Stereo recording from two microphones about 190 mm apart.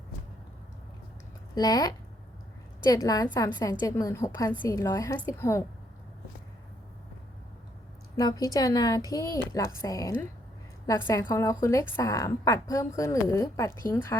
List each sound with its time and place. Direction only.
1.5 s a woman's voice: 20° left (ahead or behind)
8.1 s a woman's voice: 20° left (ahead or behind)